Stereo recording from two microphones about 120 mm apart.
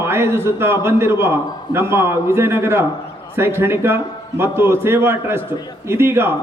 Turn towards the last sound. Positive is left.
turn(degrees=-20)  # may be behind; listen again after turning